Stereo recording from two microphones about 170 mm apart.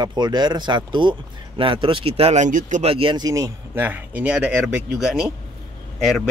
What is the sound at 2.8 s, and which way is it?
Speech, 30° right (ahead or behind).